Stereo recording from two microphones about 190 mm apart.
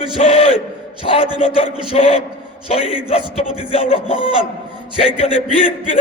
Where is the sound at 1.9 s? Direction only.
30° left (ahead or behind).